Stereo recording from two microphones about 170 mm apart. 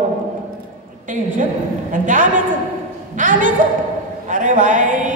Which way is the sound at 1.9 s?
50° right (ahead or behind).